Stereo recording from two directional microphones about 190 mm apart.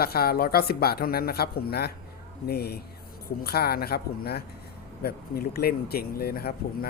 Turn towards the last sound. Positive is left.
turn(degrees=55)  # may be behind; listen again after turning